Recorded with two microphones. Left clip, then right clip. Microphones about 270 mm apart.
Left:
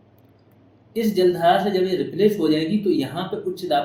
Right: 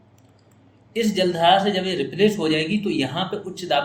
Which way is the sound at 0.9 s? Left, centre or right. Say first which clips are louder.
Left 2 dB; right.